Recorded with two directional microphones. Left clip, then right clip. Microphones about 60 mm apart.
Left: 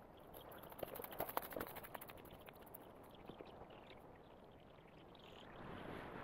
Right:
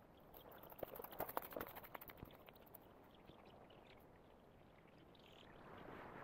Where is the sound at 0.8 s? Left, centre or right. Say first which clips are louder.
Left 2 dB; centre.